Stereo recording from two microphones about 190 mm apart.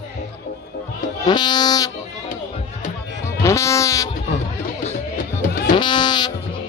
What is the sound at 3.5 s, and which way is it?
Music, 15° left (ahead or behind).